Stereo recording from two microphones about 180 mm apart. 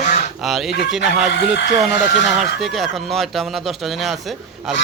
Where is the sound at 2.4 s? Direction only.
Centre (ahead or behind).